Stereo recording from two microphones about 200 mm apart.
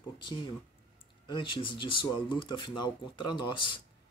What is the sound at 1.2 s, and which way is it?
Speech, 25° left (ahead or behind).